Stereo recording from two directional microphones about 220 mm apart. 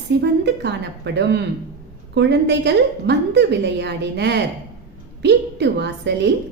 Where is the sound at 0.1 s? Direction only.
50° right (ahead or behind).